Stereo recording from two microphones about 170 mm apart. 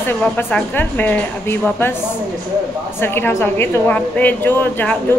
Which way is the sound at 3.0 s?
15° left (ahead or behind).